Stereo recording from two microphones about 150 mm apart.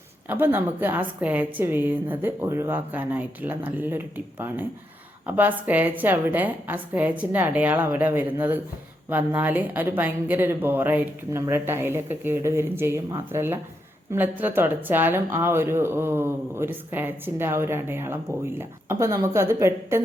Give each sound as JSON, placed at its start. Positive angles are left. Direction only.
{"t": 0.3, "sound": "speech", "side_deg": -15}